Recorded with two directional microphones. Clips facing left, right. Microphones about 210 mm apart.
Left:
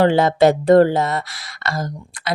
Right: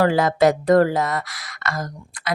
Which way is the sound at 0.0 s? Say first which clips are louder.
Left 3 dB; 25° left (ahead or behind).